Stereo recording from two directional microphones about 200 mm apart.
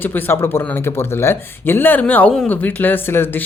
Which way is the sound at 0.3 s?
10° left (ahead or behind).